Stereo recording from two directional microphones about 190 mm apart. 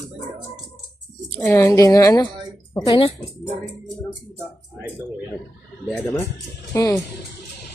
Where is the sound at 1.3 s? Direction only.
10° left (ahead or behind).